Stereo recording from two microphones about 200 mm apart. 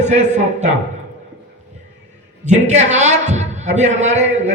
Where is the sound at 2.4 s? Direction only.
35° right (ahead or behind).